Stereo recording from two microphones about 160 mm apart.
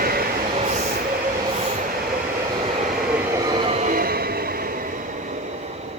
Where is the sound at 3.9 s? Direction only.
70° right (ahead or behind).